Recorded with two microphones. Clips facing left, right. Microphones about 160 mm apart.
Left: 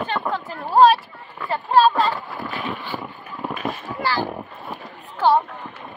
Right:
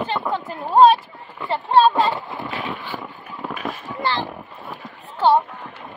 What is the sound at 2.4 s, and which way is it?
Boat, 20° right (ahead or behind).